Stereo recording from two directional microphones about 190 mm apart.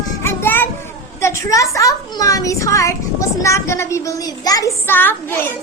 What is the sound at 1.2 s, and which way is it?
A child's voice, 15° left (ahead or behind).